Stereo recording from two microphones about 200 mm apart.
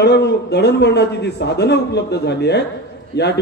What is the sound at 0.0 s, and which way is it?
A man's voice, 55° left (ahead or behind).